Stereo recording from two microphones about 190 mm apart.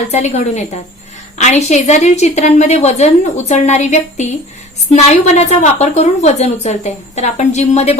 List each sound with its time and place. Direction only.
0.1 s a woman's voice: 35° left (ahead or behind)